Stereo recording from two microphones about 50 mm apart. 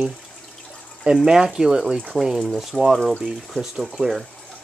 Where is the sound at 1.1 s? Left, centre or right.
Centre.